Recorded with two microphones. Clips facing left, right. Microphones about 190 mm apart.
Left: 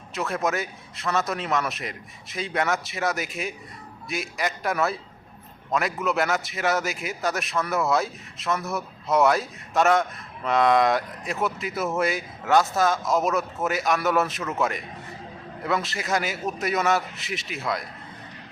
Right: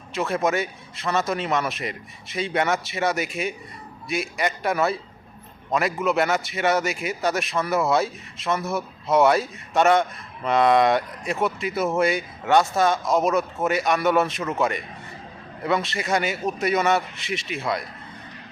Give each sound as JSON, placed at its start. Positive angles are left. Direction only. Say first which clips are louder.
{"t": 0.1, "sound": "a man's voice", "louder": "right 3 dB", "side_deg": 0}